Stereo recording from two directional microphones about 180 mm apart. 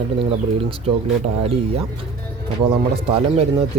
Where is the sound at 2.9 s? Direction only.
30° right (ahead or behind).